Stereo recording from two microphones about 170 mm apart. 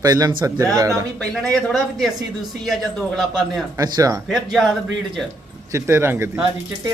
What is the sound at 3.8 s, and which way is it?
Speech, 20° right (ahead or behind).